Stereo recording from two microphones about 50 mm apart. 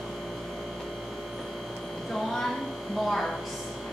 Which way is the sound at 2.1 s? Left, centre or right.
Centre.